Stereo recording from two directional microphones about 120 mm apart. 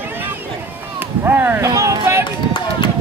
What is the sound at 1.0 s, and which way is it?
Run, 15° right (ahead or behind).